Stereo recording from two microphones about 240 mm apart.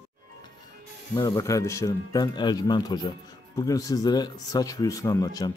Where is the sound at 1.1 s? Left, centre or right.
Centre.